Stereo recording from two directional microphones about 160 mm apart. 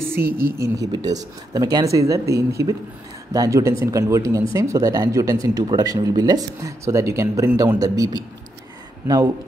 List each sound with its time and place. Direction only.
0.2 s a woman's voice: 65° right (ahead or behind)
0.6 s speech: 25° right (ahead or behind)